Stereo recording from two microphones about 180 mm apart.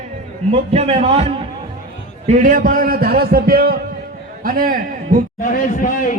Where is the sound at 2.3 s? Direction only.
45° right (ahead or behind).